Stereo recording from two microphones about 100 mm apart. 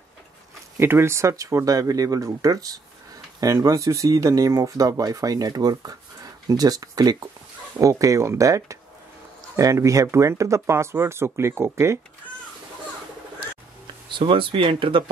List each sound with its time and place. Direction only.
0.7 s speech: 25° right (ahead or behind)
14.1 s speech: 60° right (ahead or behind)